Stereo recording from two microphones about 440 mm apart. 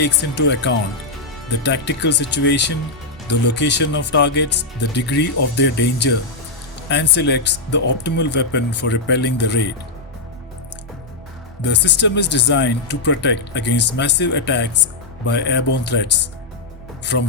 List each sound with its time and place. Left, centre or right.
0.0 s speech: left
11.6 s speech: left